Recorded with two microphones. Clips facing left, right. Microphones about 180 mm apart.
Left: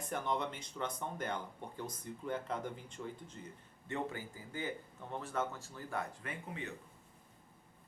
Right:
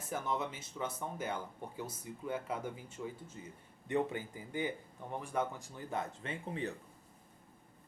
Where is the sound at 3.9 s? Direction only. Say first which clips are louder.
Right 6 dB; 20° right (ahead or behind).